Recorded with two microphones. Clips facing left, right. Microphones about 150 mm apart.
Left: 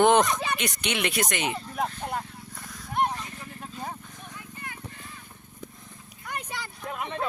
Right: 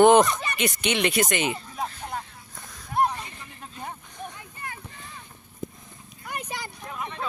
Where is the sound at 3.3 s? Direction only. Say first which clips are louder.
Left 3 dB; centre (ahead or behind).